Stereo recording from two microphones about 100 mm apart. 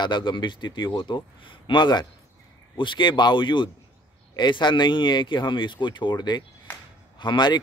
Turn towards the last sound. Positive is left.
turn(degrees=50)  # may be behind; listen again after turning